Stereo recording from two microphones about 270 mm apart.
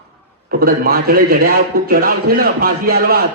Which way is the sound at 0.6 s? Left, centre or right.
Right.